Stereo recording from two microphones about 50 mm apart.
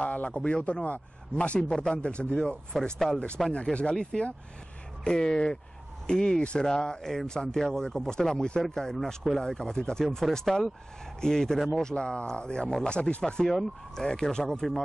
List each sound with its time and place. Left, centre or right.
0.0 s a man's voice: left; by 3.5 s centre
3.9 s speech: centre